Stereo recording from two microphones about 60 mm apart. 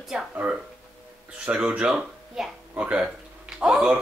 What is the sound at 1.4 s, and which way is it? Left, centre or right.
Speech, centre.